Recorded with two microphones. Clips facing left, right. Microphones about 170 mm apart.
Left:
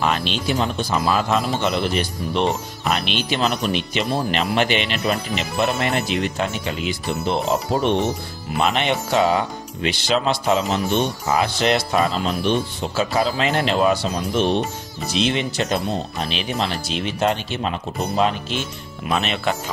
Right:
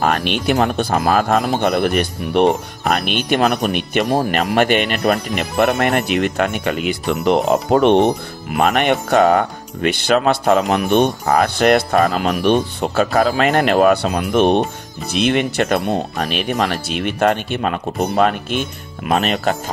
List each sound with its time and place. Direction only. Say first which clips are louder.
0.0 s speech: right 4 dB; 55° right (ahead or behind)